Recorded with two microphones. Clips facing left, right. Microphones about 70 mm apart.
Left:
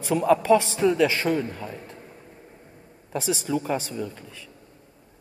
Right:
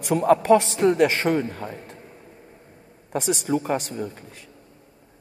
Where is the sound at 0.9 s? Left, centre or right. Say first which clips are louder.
Right 2 dB; right.